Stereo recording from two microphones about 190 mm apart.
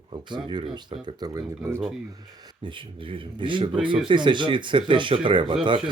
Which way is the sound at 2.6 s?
25° right (ahead or behind).